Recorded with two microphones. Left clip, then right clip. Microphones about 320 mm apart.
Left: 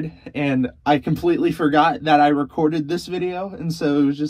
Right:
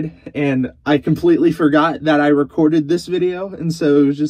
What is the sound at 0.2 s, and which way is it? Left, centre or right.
Speech, centre.